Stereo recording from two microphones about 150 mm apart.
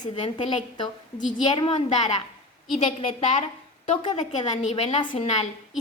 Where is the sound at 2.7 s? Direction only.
40° left (ahead or behind).